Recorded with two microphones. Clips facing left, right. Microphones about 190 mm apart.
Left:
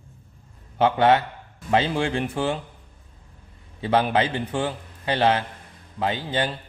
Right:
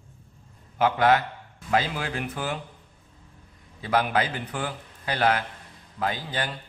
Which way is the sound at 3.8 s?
25° left (ahead or behind).